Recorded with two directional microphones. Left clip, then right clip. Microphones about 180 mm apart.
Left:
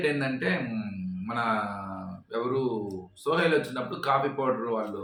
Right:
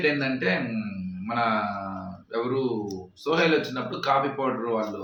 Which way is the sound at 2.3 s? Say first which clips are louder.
Right 2 dB; 10° left (ahead or behind).